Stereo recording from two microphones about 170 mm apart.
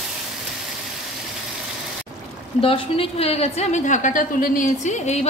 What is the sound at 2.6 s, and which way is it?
A woman's voice, 35° left (ahead or behind).